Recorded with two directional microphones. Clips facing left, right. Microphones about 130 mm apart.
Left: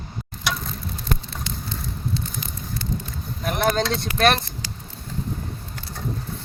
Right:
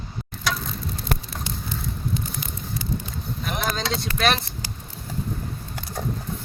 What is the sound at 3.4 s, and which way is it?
Speech, 50° left (ahead or behind).